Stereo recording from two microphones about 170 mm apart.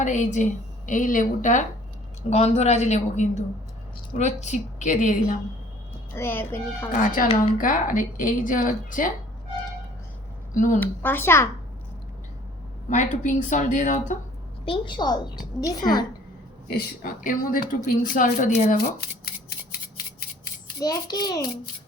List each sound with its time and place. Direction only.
0.0 s a woman's voice: 45° left (ahead or behind)
6.1 s speech: 15° left (ahead or behind)
6.9 s speech: 55° left (ahead or behind)
10.5 s speech: 50° left (ahead or behind)
10.8 s speech: 10° left (ahead or behind)
12.9 s speech: 45° left (ahead or behind)
14.6 s a child's voice: 30° left (ahead or behind)
16.6 s speech: 65° left (ahead or behind); by 18.8 s 45° left (ahead or behind)
18.9 s scissors: 65° left (ahead or behind)
20.8 s a child's voice: 25° left (ahead or behind)